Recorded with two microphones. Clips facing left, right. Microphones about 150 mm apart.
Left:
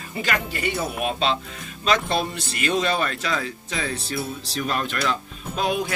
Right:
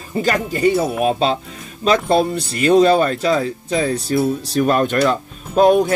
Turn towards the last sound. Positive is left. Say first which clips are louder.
# right 12 dB
turn(degrees=-45)  # may be behind; listen again after turning